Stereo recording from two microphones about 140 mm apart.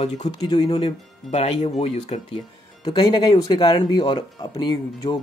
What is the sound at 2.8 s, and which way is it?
Speech, 35° left (ahead or behind).